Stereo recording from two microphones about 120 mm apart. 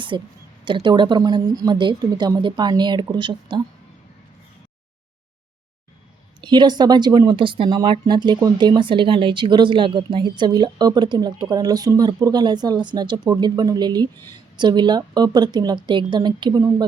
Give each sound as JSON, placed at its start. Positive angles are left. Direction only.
{"t": 0.1, "sound": "speech", "side_deg": -40}
{"t": 6.4, "sound": "speech", "side_deg": -40}